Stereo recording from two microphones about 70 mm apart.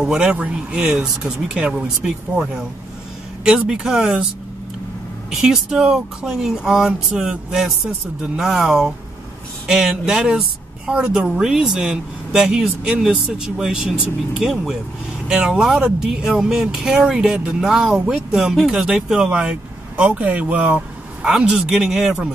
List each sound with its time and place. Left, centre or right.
0.0 s speech: centre
5.3 s speech: centre
20.0 s speech: right
21.3 s speech: centre